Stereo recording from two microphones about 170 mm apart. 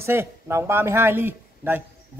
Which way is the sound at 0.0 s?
15° right (ahead or behind).